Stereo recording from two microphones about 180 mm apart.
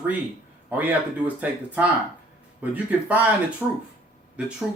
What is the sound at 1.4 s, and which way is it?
Speech, 10° right (ahead or behind).